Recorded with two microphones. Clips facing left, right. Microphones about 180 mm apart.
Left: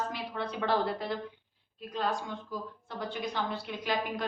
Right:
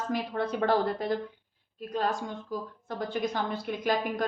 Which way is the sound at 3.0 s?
45° right (ahead or behind).